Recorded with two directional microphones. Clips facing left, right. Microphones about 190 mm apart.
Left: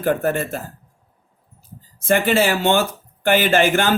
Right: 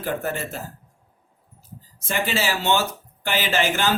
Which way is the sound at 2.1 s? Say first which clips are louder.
Left 8 dB; 55° left (ahead or behind).